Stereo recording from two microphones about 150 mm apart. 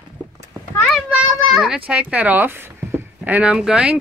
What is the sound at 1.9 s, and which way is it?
Speech, 10° right (ahead or behind).